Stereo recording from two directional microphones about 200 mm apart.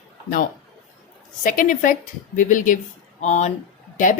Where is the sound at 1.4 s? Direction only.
40° left (ahead or behind).